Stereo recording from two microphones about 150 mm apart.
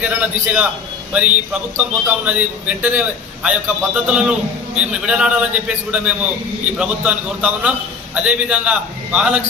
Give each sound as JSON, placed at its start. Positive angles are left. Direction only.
{"t": 0.0, "sound": "a man's voice", "side_deg": -10}